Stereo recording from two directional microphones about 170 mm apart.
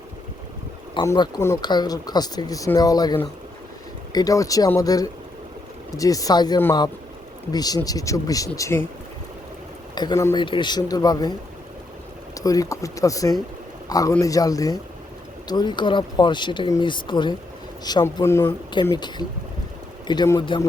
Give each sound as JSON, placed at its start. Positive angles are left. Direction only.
{"t": 1.0, "sound": "speech", "side_deg": 20}
{"t": 9.9, "sound": "speech", "side_deg": 25}
{"t": 12.4, "sound": "speech", "side_deg": 20}
{"t": 18.9, "sound": "speech", "side_deg": 25}